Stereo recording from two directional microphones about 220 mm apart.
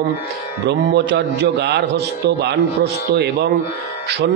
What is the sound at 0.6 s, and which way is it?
Speech, 50° right (ahead or behind).